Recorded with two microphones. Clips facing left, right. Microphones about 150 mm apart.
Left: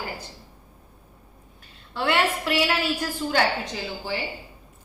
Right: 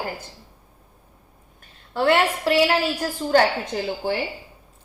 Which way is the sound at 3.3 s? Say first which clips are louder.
Right 7 dB; 50° right (ahead or behind).